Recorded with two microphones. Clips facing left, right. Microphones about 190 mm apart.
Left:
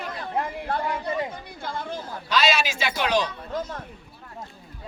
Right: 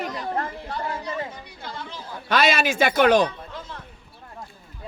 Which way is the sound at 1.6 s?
50° left (ahead or behind).